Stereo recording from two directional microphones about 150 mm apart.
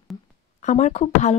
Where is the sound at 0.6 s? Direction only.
50° left (ahead or behind).